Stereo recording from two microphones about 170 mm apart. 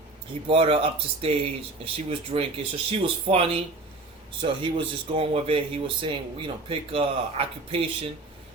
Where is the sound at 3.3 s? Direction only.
50° right (ahead or behind).